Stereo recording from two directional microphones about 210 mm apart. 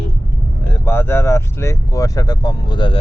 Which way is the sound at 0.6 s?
10° left (ahead or behind).